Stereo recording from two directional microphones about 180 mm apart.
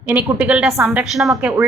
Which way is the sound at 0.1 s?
5° right (ahead or behind).